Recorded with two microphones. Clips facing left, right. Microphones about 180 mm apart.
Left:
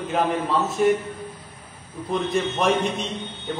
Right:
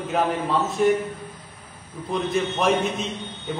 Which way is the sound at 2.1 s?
Centre (ahead or behind).